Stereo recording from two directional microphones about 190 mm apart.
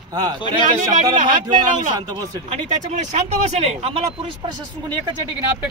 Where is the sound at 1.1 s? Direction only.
40° right (ahead or behind).